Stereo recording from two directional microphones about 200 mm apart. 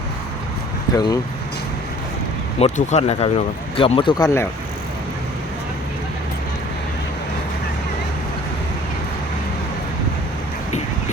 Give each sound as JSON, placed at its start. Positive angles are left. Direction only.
{"t": 0.9, "sound": "speech", "side_deg": 20}
{"t": 2.6, "sound": "speech", "side_deg": 35}